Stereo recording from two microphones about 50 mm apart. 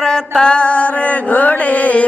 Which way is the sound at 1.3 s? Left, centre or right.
Left.